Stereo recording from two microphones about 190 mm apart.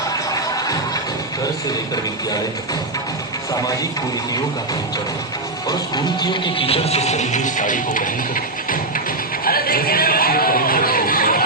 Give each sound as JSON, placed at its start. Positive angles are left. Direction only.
{"t": 0.3, "sound": "music", "side_deg": 20}
{"t": 5.6, "sound": "speech", "side_deg": 20}
{"t": 9.4, "sound": "a sound", "side_deg": 50}